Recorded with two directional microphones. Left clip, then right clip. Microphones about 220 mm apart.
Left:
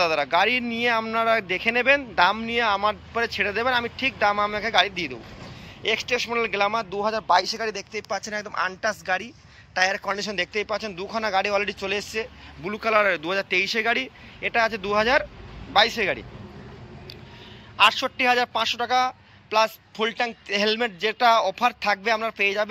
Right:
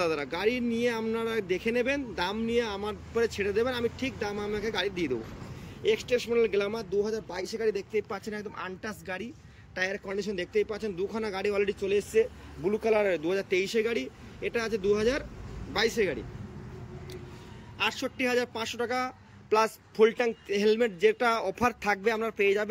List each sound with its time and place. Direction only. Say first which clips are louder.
0.0 s a man's voice: left 8 dB; 10° right (ahead or behind)
17.7 s a man's voice: left 11 dB; 10° right (ahead or behind)